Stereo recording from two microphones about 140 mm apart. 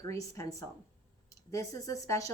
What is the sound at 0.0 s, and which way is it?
A woman's voice, 20° left (ahead or behind).